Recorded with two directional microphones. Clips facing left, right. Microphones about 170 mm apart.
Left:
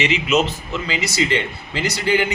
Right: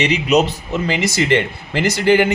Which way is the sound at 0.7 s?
50° right (ahead or behind).